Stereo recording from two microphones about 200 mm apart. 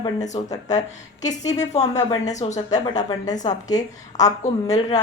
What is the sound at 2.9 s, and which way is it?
Speech, 20° left (ahead or behind).